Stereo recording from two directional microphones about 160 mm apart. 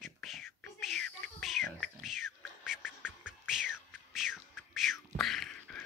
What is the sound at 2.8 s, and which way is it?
Music, 10° left (ahead or behind).